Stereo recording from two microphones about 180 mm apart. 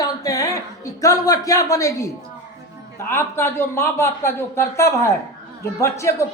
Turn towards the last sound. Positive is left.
turn(degrees=15)  # may be behind; listen again after turning